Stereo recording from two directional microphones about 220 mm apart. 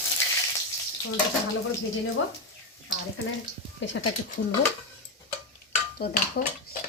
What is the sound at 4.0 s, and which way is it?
Speech, 55° left (ahead or behind).